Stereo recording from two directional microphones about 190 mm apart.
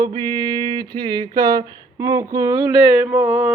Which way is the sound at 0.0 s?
25° right (ahead or behind).